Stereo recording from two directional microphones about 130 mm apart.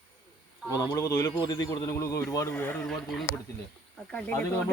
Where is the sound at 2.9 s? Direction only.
Centre (ahead or behind).